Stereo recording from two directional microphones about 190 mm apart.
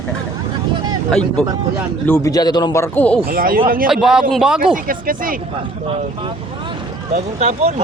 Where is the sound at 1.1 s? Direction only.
5° left (ahead or behind).